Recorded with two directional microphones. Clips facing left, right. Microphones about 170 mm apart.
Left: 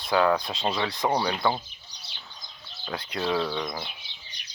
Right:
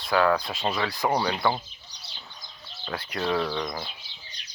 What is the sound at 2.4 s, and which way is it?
Speech, 15° left (ahead or behind).